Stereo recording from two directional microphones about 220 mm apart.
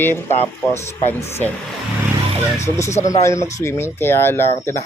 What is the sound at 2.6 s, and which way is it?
Speech, 10° left (ahead or behind).